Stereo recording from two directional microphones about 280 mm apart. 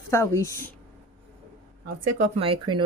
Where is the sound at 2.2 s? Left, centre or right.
Centre.